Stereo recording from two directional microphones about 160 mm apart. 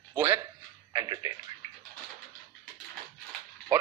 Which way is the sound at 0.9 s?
20° right (ahead or behind).